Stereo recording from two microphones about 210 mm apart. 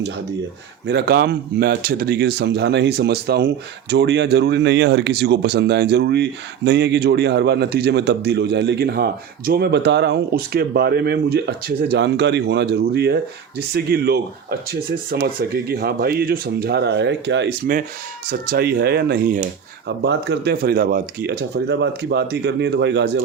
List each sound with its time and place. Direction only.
0.9 s speech: 50° right (ahead or behind)
20.0 s speech: 55° right (ahead or behind)